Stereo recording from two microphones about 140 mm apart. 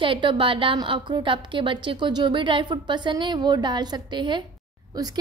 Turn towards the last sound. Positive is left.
turn(degrees=-35)  # may be behind; listen again after turning